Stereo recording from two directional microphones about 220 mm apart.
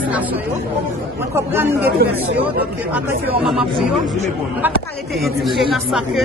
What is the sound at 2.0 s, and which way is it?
Speech, 45° right (ahead or behind).